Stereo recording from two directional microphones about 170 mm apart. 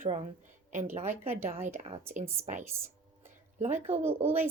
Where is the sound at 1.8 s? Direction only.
45° right (ahead or behind).